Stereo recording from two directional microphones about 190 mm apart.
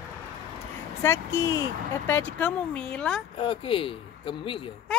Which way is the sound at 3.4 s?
25° left (ahead or behind).